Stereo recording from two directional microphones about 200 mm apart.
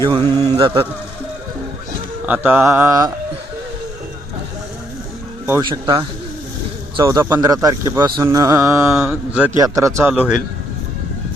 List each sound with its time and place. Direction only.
0.0 s speech: 20° right (ahead or behind)
2.2 s speech: 10° right (ahead or behind)
5.6 s speech: 20° right (ahead or behind); by 10.3 s 5° right (ahead or behind)